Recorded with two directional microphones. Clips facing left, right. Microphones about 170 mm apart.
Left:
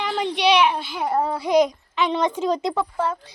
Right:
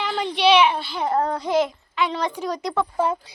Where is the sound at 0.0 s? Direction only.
Centre (ahead or behind); by 2.8 s 20° left (ahead or behind).